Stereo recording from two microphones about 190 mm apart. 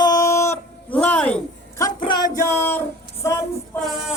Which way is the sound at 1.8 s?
25° left (ahead or behind).